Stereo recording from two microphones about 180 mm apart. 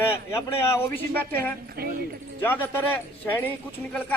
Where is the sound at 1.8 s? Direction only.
60° right (ahead or behind).